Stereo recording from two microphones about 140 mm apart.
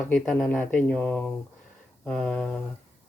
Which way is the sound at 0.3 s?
10° left (ahead or behind).